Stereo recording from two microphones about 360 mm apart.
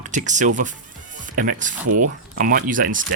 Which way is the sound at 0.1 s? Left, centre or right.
Right.